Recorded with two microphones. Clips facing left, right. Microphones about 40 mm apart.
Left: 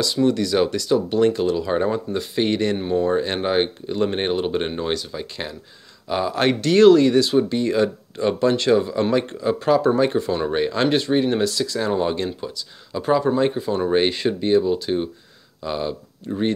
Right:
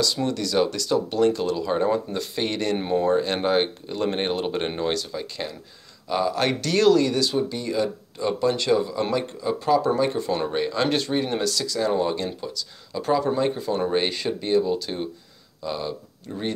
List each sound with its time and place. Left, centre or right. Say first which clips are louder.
0.0 s speech: left 5 dB; left
11.4 s speech: left 2 dB; left